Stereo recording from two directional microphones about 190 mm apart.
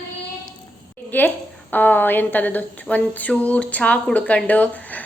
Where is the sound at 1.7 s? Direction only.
10° left (ahead or behind).